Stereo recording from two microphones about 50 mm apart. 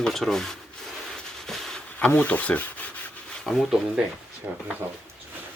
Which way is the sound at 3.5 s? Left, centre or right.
Centre.